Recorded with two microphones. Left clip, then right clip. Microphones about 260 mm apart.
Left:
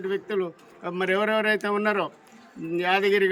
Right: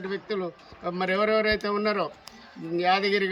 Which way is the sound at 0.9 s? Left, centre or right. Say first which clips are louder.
Even; centre.